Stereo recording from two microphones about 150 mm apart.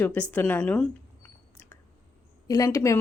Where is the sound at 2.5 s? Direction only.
25° left (ahead or behind).